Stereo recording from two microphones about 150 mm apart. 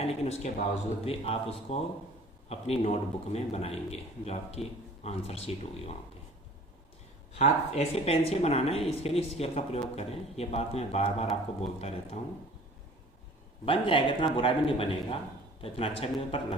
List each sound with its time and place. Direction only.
0.0 s a sound: 45° left (ahead or behind)
1.0 s a man's voice: 40° left (ahead or behind)
7.3 s a man's voice: 45° left (ahead or behind)
13.7 s a man's voice: 35° left (ahead or behind)